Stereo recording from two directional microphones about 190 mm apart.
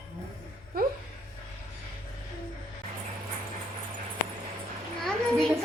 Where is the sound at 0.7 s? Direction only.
55° right (ahead or behind).